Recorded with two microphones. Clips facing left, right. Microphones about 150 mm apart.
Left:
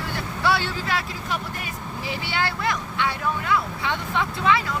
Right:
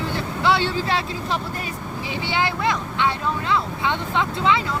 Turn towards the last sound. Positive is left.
turn(degrees=-20)  # may be behind; listen again after turning